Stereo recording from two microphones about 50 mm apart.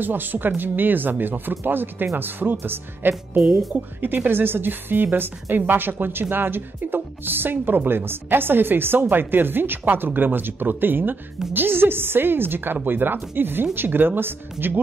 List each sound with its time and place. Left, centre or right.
0.0 s speech: right